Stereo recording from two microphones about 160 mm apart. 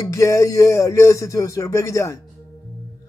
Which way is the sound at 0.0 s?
20° left (ahead or behind).